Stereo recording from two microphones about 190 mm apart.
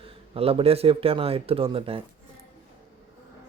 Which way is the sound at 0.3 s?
30° right (ahead or behind).